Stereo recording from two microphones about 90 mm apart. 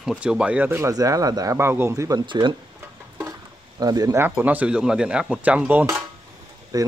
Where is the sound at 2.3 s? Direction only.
60° right (ahead or behind).